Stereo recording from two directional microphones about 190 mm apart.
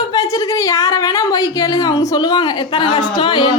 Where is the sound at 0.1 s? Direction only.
20° left (ahead or behind).